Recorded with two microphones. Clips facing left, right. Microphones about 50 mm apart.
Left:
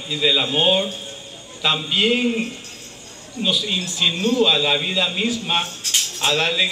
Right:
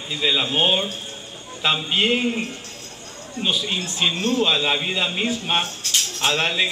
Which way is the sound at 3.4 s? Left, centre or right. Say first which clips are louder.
Left 2 dB; centre.